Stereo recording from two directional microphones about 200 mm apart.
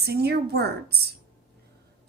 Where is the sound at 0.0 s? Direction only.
50° right (ahead or behind).